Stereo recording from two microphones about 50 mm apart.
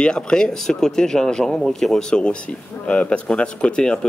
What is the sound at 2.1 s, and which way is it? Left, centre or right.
Speech, centre.